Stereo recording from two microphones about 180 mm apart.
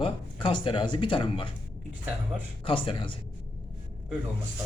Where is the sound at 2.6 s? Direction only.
30° left (ahead or behind).